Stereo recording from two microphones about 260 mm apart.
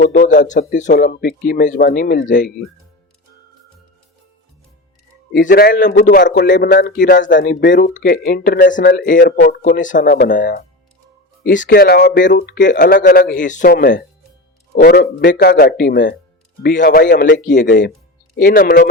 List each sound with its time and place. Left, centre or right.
0.0 s speech: left
5.3 s speech: left